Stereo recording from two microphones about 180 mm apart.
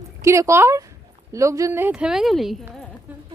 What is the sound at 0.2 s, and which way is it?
Speech, 15° right (ahead or behind).